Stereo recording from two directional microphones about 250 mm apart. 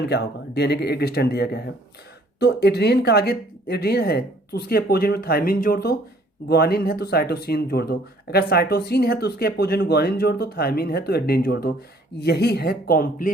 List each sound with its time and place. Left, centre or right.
0.0 s speech: left